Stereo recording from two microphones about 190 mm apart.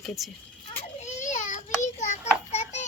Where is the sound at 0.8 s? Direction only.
35° left (ahead or behind).